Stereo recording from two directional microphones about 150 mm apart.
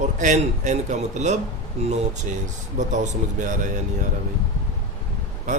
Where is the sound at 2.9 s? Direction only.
55° right (ahead or behind).